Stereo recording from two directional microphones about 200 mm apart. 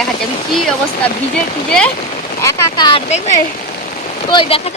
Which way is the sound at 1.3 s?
5° left (ahead or behind).